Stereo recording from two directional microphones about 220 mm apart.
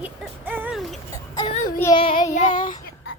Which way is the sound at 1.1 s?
20° left (ahead or behind).